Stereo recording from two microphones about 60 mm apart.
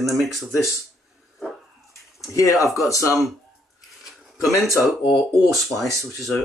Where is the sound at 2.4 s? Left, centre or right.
Left.